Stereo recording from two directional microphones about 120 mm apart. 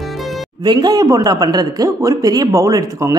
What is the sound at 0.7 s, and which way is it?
A man's voice, 35° right (ahead or behind).